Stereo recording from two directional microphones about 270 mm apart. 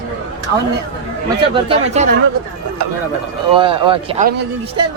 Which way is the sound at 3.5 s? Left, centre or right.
Centre.